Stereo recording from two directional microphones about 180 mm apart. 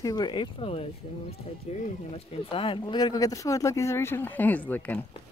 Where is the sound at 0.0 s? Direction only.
20° left (ahead or behind).